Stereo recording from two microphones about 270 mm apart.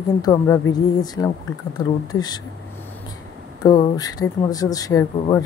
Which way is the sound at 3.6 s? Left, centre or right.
Centre.